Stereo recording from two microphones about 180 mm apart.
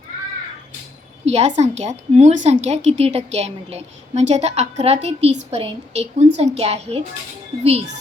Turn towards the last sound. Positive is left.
turn(degrees=-40)  # may be behind; listen again after turning